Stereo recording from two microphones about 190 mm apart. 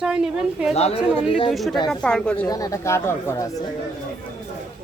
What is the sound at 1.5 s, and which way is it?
Speech, centre (ahead or behind).